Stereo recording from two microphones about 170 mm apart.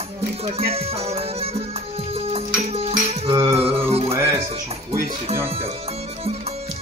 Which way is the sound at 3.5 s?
35° right (ahead or behind).